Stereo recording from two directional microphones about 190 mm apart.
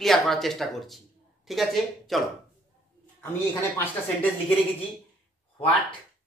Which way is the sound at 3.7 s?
10° left (ahead or behind).